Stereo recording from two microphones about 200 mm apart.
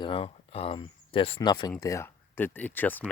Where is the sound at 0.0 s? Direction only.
25° left (ahead or behind).